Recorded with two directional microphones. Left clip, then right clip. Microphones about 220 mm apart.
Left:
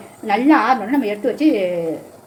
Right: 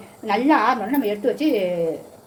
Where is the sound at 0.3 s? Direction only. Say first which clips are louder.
Left 3 dB; centre (ahead or behind).